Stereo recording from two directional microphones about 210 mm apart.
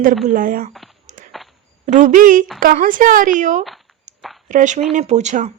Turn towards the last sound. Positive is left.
turn(degrees=-35)  # may be behind; listen again after turning